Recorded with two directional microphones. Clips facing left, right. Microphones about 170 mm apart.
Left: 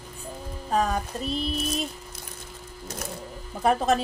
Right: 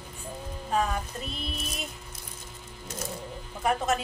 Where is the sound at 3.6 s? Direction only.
35° left (ahead or behind).